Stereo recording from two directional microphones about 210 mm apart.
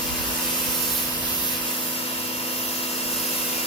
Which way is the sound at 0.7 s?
20° left (ahead or behind).